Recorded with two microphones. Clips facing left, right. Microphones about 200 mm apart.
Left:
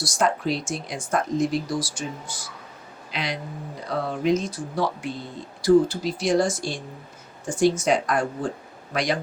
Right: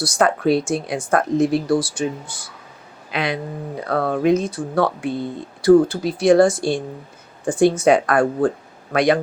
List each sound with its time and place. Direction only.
0.0 s a man's voice: 60° right (ahead or behind)